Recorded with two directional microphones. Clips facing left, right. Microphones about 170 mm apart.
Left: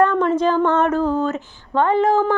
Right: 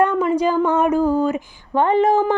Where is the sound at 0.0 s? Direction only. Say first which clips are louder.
Left 1 dB; 10° right (ahead or behind).